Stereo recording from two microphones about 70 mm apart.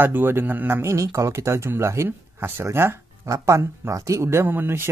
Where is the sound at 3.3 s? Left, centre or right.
Right.